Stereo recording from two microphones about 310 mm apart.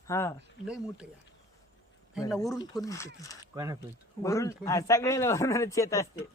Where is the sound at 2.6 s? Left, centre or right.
Centre.